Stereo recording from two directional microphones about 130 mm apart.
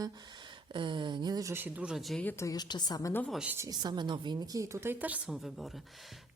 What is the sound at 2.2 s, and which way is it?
Speech, 15° left (ahead or behind).